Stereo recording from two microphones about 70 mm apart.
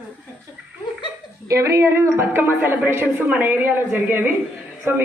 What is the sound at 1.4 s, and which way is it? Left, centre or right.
A woman's voice, right.